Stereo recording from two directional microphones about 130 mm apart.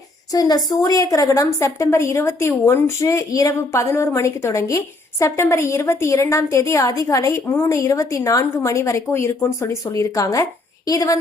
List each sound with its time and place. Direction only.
0.3 s a woman's voice: 30° left (ahead or behind)